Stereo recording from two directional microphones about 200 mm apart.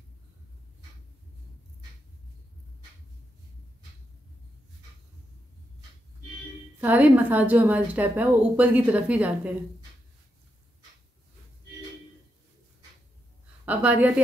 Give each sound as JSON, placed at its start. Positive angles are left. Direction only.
{"t": 6.8, "sound": "a woman's voice", "side_deg": -10}
{"t": 13.7, "sound": "a woman's voice", "side_deg": -10}